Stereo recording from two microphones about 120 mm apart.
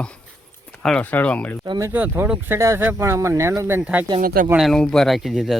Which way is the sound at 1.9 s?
15° right (ahead or behind).